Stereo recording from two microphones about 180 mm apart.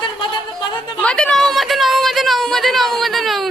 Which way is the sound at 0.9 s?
5° left (ahead or behind).